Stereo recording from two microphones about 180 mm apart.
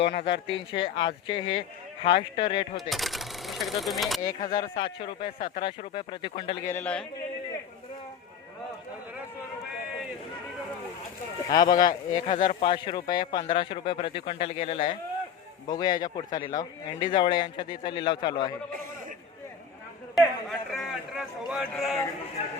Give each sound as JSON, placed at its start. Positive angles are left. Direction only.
{"t": 0.0, "sound": "speech", "side_deg": 75}
{"t": 0.7, "sound": "a man's voice", "side_deg": 30}
{"t": 2.9, "sound": "speech", "side_deg": 0}
{"t": 4.2, "sound": "a man's voice", "side_deg": 20}
{"t": 6.7, "sound": "speech", "side_deg": 10}
{"t": 11.5, "sound": "a man's voice", "side_deg": 20}
{"t": 12.1, "sound": "speech", "side_deg": 40}
{"t": 12.4, "sound": "a man's voice", "side_deg": 25}
{"t": 20.1, "sound": "a man's voice", "side_deg": 0}